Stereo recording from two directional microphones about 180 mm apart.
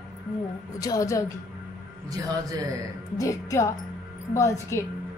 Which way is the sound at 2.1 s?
20° right (ahead or behind).